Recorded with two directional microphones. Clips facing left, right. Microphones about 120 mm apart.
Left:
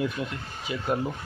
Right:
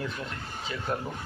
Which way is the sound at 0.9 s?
15° left (ahead or behind).